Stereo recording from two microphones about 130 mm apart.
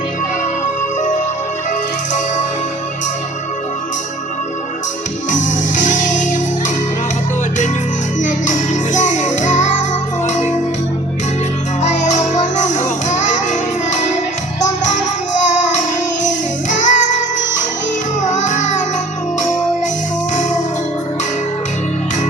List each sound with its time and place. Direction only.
5.4 s music: 75° left (ahead or behind)
8.2 s music: 75° left (ahead or behind)
11.8 s music: 65° left (ahead or behind)
16.2 s music: 70° left (ahead or behind)
18.3 s music: 70° left (ahead or behind)
20.3 s music: 70° left (ahead or behind)